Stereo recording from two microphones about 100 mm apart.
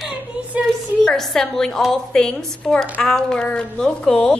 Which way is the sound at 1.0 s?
5° left (ahead or behind).